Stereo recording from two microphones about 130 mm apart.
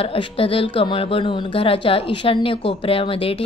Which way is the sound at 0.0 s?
45° left (ahead or behind).